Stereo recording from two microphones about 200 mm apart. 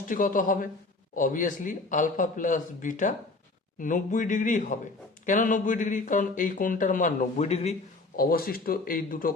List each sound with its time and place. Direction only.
0.1 s speech: 40° left (ahead or behind)
8.1 s speech: 45° left (ahead or behind)